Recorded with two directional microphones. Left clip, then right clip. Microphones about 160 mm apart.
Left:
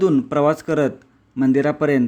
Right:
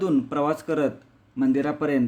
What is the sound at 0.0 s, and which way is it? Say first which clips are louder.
Speech: left 7 dB; 40° left (ahead or behind).